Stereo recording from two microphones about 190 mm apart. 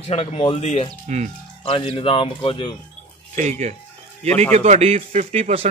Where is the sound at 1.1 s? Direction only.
40° right (ahead or behind).